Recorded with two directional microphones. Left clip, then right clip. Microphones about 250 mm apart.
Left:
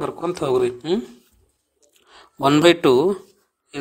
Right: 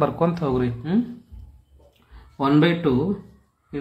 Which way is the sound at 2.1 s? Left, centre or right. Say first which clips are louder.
Left 2 dB; left.